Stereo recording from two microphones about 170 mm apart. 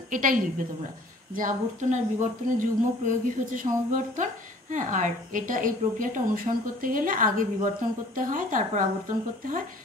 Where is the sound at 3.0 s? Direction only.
50° right (ahead or behind).